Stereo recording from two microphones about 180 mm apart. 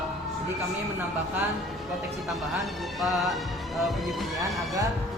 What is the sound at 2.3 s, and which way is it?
Music, centre (ahead or behind).